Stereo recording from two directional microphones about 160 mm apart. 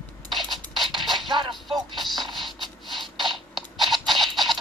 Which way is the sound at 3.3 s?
Centre (ahead or behind).